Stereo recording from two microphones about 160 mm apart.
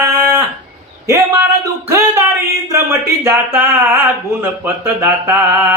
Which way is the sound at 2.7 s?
15° right (ahead or behind).